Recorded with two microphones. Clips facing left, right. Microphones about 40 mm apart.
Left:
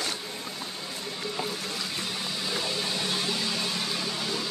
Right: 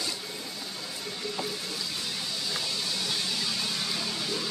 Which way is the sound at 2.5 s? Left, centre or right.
Left.